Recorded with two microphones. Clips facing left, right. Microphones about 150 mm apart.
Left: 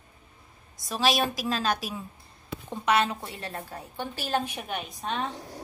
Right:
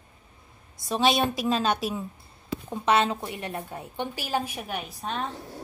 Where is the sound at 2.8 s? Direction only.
25° right (ahead or behind).